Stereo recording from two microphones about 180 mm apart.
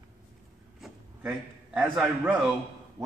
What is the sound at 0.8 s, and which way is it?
A man's voice, 5° right (ahead or behind).